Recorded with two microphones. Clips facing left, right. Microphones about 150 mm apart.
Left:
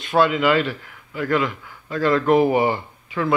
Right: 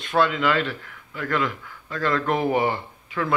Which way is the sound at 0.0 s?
10° left (ahead or behind).